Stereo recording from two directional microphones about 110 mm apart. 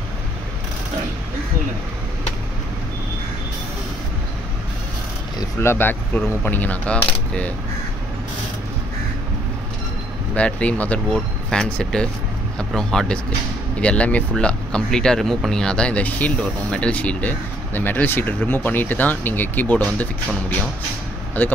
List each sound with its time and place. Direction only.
5.6 s speech: 20° left (ahead or behind)
10.3 s speech: 10° left (ahead or behind)